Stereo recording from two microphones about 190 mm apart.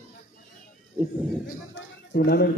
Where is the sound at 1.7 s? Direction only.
65° left (ahead or behind).